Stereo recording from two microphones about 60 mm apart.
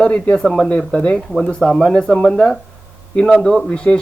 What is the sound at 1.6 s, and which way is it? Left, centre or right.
Speech, centre.